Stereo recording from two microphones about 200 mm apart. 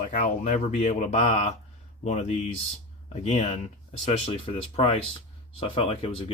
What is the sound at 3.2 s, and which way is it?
Speech, 35° left (ahead or behind).